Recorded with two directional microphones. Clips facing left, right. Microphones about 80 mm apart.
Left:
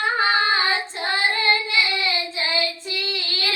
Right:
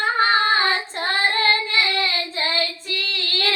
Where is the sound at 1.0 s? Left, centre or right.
Right.